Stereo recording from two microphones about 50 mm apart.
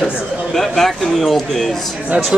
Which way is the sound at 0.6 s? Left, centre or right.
Centre.